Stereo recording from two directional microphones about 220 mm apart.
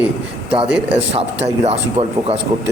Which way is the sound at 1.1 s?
30° right (ahead or behind).